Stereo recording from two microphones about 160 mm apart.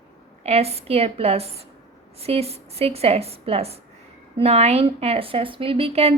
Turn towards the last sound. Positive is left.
turn(degrees=-40)  # may be behind; listen again after turning